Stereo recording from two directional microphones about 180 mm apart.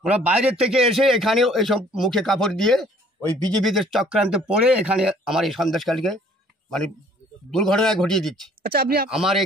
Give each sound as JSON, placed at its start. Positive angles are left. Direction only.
{"t": 0.0, "sound": "a man's voice", "side_deg": -5}
{"t": 7.5, "sound": "a man's voice", "side_deg": 0}
{"t": 8.6, "sound": "speech", "side_deg": -60}
{"t": 9.1, "sound": "a man's voice", "side_deg": 0}